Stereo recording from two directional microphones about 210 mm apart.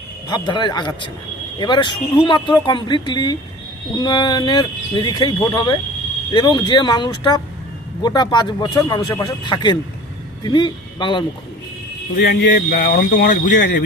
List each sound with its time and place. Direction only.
0.3 s speech: 20° left (ahead or behind)
12.1 s speech: 45° left (ahead or behind)
12.4 s a man's voice: 60° left (ahead or behind); by 13.8 s 40° left (ahead or behind)